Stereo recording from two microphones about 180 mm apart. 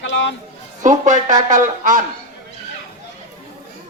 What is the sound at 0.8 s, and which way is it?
Speech, 45° right (ahead or behind).